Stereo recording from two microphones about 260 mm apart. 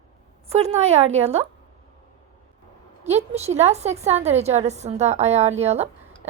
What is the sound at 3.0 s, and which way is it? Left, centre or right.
Speech, right.